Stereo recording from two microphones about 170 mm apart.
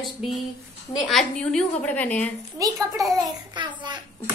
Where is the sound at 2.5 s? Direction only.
20° right (ahead or behind).